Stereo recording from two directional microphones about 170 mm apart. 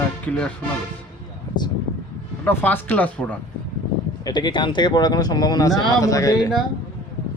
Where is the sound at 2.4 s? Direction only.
10° left (ahead or behind).